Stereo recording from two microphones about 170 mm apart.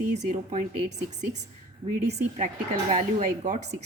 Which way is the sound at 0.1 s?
40° right (ahead or behind).